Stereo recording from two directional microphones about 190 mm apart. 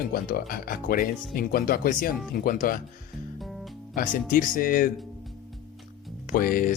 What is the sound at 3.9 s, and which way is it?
Speech, 45° left (ahead or behind).